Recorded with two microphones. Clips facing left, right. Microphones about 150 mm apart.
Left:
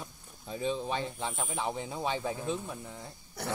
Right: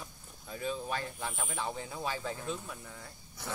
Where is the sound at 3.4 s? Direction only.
65° left (ahead or behind).